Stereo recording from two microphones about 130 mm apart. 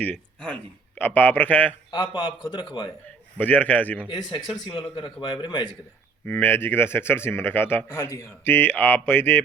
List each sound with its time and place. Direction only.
0.0 s a man's voice: 10° left (ahead or behind)
1.9 s a man's voice: 35° left (ahead or behind)
3.3 s a man's voice: 15° left (ahead or behind)
4.1 s a man's voice: 35° left (ahead or behind)
6.2 s a man's voice: 15° left (ahead or behind)